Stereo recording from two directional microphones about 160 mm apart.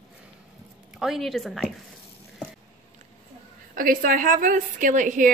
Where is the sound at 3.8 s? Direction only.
60° right (ahead or behind).